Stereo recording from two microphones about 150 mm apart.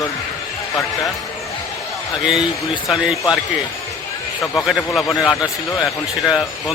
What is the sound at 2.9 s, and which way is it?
Speech, 5° right (ahead or behind).